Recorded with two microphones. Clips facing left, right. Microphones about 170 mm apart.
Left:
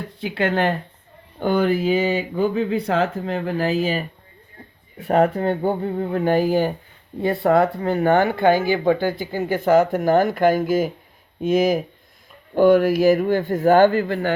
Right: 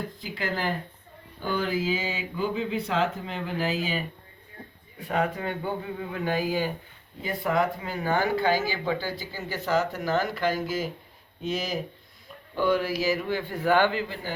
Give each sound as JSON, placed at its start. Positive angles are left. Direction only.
{"t": 0.1, "sound": "speech", "side_deg": 75}
{"t": 1.4, "sound": "speech", "side_deg": 60}
{"t": 5.5, "sound": "speech", "side_deg": 50}
{"t": 7.2, "sound": "speech", "side_deg": 70}